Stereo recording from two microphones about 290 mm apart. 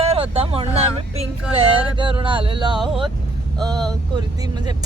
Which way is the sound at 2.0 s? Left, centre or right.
Centre.